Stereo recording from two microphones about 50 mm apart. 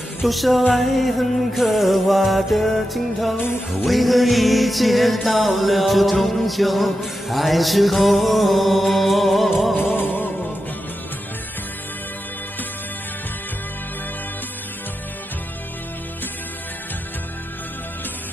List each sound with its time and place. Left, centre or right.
0.2 s music: centre
9.8 s music: left